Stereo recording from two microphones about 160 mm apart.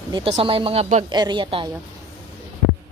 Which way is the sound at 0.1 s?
35° right (ahead or behind).